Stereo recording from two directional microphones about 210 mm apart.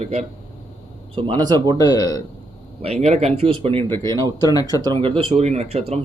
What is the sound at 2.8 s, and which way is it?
Speech, 30° right (ahead or behind).